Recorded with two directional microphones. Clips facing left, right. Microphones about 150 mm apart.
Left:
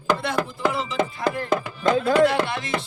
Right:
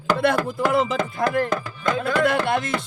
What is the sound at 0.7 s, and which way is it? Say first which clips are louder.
Speech: right 4 dB; 50° right (ahead or behind).